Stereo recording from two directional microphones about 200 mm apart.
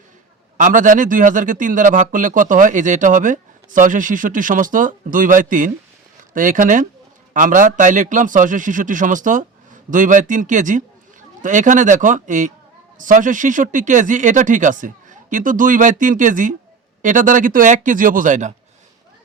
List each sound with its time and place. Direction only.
0.5 s a man's voice: 40° right (ahead or behind)